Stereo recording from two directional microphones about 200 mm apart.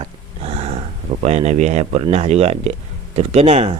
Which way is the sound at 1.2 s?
35° right (ahead or behind).